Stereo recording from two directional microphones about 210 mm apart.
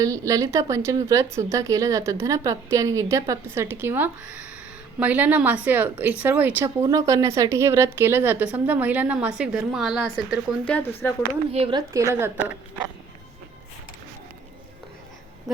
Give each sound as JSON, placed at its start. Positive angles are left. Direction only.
{"t": 0.0, "sound": "a woman's voice", "side_deg": -15}
{"t": 10.7, "sound": "speech", "side_deg": 10}
{"t": 11.5, "sound": "speech", "side_deg": -25}
{"t": 12.1, "sound": "a woman's voice", "side_deg": -10}